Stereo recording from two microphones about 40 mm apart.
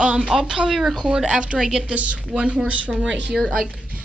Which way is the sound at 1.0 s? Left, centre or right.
Right.